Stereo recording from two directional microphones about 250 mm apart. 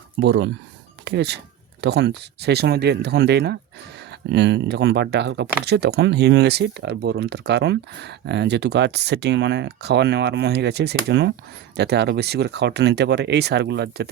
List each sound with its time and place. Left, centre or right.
0.2 s speech: right